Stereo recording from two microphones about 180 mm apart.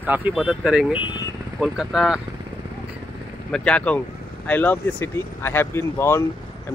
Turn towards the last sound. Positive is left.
turn(degrees=15)  # may be behind; listen again after turning